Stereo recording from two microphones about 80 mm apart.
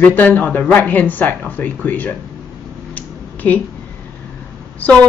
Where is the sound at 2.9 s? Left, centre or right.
Centre.